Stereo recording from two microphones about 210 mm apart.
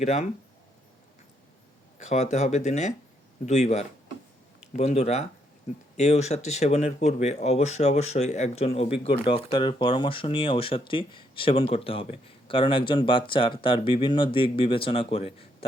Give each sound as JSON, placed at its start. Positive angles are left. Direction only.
{"t": 0.0, "sound": "speech", "side_deg": 30}
{"t": 2.0, "sound": "speech", "side_deg": 35}